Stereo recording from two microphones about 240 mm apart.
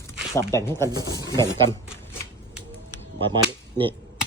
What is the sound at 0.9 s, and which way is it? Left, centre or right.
Speech, centre.